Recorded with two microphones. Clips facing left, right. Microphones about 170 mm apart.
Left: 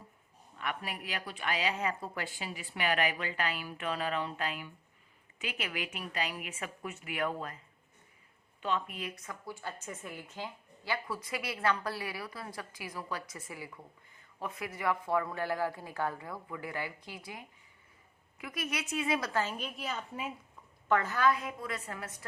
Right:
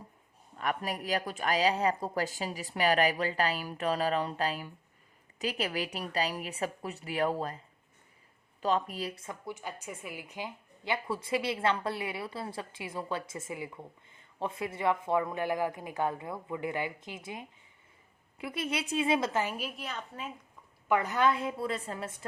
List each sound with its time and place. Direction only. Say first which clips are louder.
0.6 s speech: right 5 dB; 40° right (ahead or behind)
8.6 s a woman's voice: right 5 dB; 35° right (ahead or behind); by 19.5 s 20° right (ahead or behind)
19.5 s a woman's voice: even; centre (ahead or behind)
20.8 s a woman's voice: right 1 dB; 15° right (ahead or behind)